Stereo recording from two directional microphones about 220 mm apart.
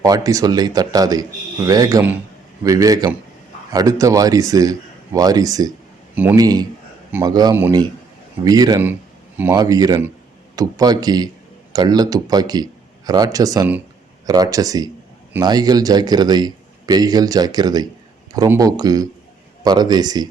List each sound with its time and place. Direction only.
0.0 s a man's voice: 15° right (ahead or behind)